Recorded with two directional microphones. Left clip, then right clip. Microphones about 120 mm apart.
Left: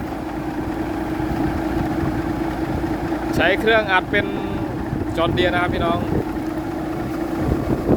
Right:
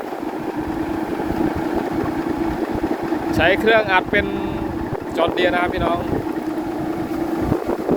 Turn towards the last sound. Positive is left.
turn(degrees=0)  # may be behind; listen again after turning